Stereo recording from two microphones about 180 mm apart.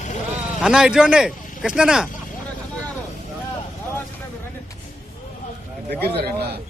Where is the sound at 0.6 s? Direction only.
5° right (ahead or behind).